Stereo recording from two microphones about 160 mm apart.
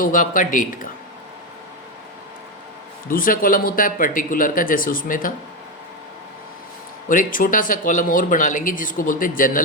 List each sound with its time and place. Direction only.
0.0 s speech: 55° left (ahead or behind)
3.1 s speech: 60° left (ahead or behind)
7.1 s speech: 60° left (ahead or behind)